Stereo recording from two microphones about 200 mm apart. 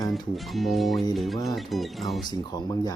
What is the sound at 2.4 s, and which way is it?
Music, 20° left (ahead or behind).